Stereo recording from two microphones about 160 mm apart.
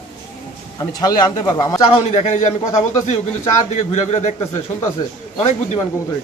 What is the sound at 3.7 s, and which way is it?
Speech, 45° left (ahead or behind).